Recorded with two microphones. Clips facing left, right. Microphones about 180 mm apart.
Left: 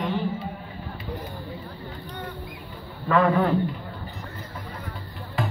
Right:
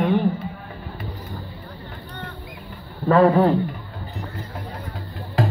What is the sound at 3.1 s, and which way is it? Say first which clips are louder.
Speech: right 5 dB; 35° right (ahead or behind).